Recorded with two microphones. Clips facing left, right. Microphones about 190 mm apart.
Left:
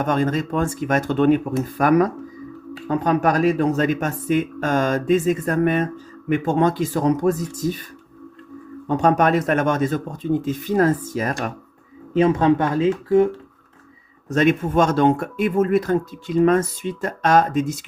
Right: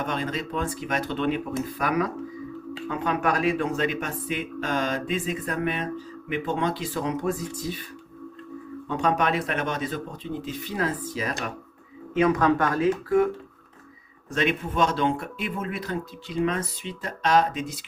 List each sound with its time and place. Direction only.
0.0 s speech: 45° left (ahead or behind)
8.9 s speech: 45° left (ahead or behind)
12.1 s speech: 25° left (ahead or behind)
14.3 s speech: 45° left (ahead or behind)